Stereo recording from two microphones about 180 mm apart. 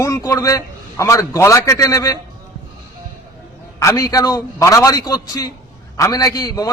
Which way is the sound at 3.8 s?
20° left (ahead or behind).